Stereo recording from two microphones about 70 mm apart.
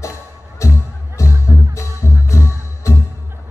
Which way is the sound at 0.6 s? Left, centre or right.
Left.